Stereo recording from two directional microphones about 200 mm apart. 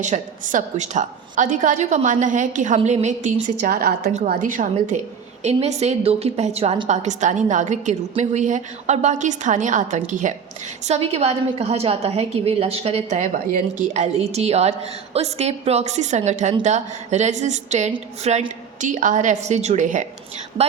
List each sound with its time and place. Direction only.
0.0 s a woman's voice: 40° right (ahead or behind)